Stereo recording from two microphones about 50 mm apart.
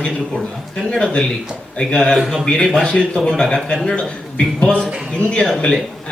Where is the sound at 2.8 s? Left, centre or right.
Centre.